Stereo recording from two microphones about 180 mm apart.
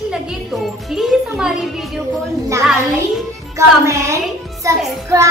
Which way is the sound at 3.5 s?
15° right (ahead or behind).